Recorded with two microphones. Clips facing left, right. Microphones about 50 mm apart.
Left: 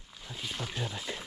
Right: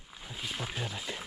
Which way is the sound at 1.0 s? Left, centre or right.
Centre.